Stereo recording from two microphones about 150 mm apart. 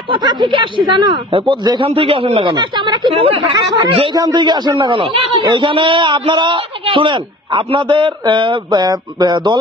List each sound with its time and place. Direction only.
0.1 s a man's voice: 30° right (ahead or behind)